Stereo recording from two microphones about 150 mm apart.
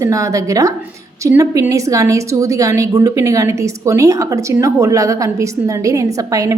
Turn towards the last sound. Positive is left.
turn(degrees=-20)  # may be behind; listen again after turning